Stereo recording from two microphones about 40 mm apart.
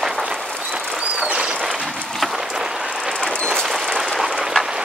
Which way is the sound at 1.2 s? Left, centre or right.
Right.